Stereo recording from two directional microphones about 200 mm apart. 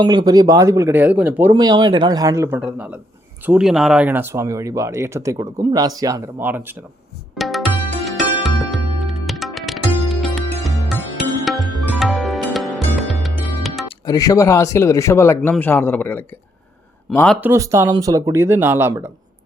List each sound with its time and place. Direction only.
0.0 s speech: 20° right (ahead or behind)
7.3 s music: centre (ahead or behind)
13.8 s speech: 20° left (ahead or behind); by 17.3 s 5° left (ahead or behind)
17.4 s speech: 15° right (ahead or behind)